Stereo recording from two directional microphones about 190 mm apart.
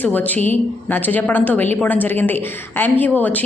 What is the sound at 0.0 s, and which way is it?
A woman's voice, 10° left (ahead or behind).